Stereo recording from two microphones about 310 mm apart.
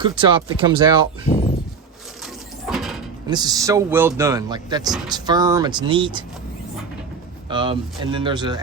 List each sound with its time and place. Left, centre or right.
0.0 s speech: centre
2.2 s a sound: centre
3.2 s speech: centre
7.5 s speech: centre